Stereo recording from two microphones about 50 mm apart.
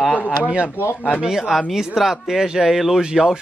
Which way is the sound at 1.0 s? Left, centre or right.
Centre.